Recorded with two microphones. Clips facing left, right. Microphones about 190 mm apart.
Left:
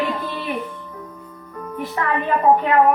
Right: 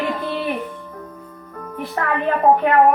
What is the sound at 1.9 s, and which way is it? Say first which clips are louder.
Speech: right 1 dB; 55° right (ahead or behind).